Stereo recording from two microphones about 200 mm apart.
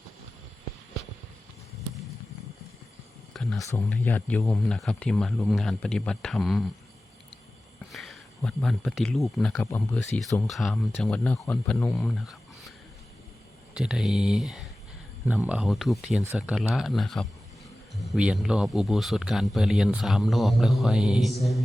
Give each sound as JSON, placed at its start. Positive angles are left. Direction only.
{"t": 3.3, "sound": "a sound", "side_deg": 0}
{"t": 3.6, "sound": "a man's voice", "side_deg": 15}
{"t": 7.9, "sound": "a sound", "side_deg": 0}
{"t": 8.4, "sound": "a man's voice", "side_deg": 0}
{"t": 10.0, "sound": "a man's voice", "side_deg": 0}
{"t": 13.7, "sound": "a man's voice", "side_deg": 0}
{"t": 16.2, "sound": "speech", "side_deg": -10}
{"t": 16.6, "sound": "a man's voice", "side_deg": 0}